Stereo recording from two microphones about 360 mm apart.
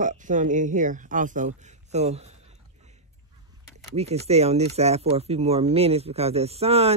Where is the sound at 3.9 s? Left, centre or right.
Centre.